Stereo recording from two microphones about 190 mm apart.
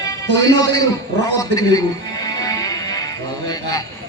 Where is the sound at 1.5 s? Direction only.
20° left (ahead or behind).